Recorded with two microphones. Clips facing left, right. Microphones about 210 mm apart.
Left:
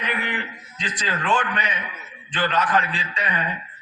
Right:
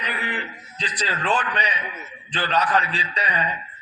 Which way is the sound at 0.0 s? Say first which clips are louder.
Left 2 dB; 35° right (ahead or behind).